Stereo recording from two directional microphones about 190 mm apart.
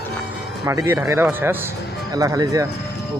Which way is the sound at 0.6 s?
15° right (ahead or behind).